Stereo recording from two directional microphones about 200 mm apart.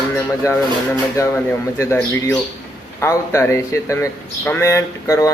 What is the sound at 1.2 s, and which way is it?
Speech, 10° left (ahead or behind).